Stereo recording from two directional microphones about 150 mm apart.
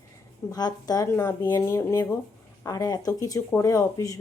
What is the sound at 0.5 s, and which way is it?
Speech, 25° left (ahead or behind).